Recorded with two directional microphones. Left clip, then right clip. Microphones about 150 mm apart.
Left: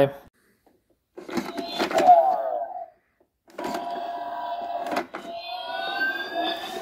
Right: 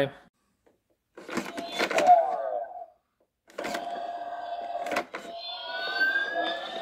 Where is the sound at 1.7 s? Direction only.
30° right (ahead or behind).